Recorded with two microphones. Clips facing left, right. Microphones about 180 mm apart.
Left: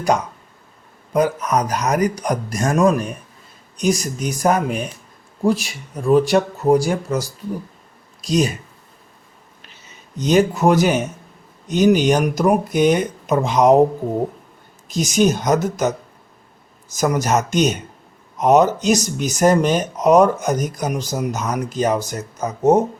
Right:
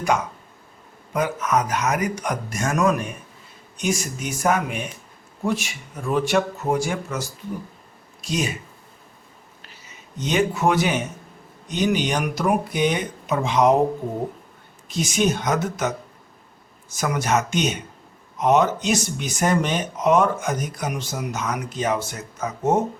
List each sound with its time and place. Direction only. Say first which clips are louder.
1.1 s speech: left 4 dB; 35° left (ahead or behind)
10.2 s speech: left 6 dB; 40° left (ahead or behind)
14.8 s speech: left 5 dB; 40° left (ahead or behind)